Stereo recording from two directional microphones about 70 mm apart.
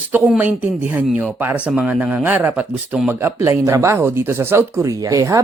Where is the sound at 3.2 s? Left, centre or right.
Right.